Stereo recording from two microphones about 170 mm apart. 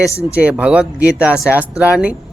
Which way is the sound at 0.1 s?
15° left (ahead or behind).